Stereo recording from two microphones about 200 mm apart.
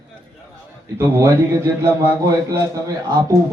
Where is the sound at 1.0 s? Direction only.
10° right (ahead or behind).